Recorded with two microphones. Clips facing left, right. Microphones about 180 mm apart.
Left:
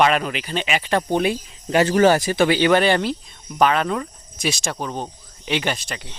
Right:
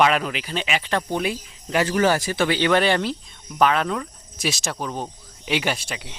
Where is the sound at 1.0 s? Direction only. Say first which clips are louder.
Left 5 dB; 25° left (ahead or behind).